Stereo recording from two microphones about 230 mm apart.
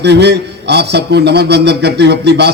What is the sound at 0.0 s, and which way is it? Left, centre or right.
A man's voice, right.